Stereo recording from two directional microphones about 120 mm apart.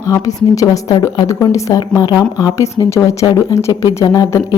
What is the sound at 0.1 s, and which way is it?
Speech, 30° left (ahead or behind).